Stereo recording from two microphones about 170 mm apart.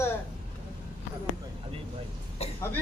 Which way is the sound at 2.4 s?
40° left (ahead or behind).